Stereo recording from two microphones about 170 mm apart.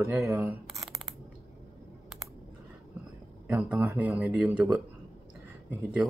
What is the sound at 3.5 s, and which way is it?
Speech, 10° right (ahead or behind).